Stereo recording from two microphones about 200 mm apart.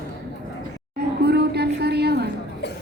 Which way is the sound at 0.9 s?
55° right (ahead or behind).